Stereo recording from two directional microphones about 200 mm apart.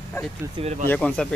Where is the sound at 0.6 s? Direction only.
35° right (ahead or behind).